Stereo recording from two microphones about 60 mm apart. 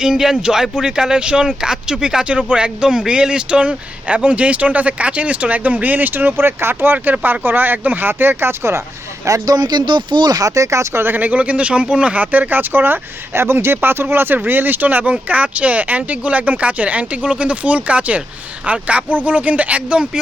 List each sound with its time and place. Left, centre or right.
0.0 s speech: centre; by 6.9 s right
6.9 s speech: right
9.2 s speech: right
11.0 s speech: right